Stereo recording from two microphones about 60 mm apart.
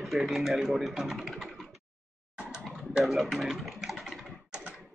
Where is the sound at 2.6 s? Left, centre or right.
Centre.